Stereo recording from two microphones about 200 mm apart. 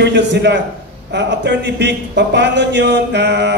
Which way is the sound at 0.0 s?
60° right (ahead or behind).